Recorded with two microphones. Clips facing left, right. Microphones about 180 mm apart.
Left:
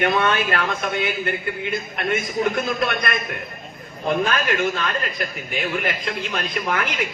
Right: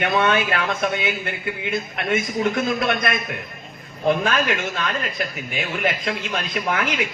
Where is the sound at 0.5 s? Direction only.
50° left (ahead or behind).